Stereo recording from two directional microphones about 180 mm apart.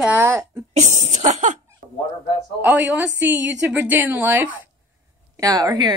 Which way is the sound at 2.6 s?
10° right (ahead or behind).